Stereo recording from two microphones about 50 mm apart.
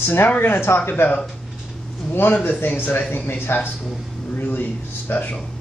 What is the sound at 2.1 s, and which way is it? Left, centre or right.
Speech, left.